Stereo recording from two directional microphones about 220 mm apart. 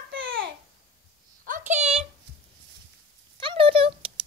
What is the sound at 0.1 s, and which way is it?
Babbling, 60° right (ahead or behind).